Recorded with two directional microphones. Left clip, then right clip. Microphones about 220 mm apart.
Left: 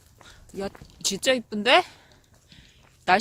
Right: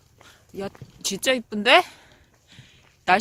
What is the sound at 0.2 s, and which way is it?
Speech, 10° right (ahead or behind).